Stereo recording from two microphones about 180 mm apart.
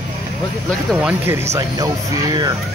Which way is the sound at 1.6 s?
20° right (ahead or behind).